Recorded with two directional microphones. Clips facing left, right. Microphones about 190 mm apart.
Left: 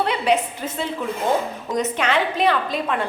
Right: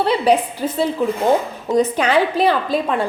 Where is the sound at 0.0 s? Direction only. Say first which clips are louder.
Right 4 dB; 35° right (ahead or behind).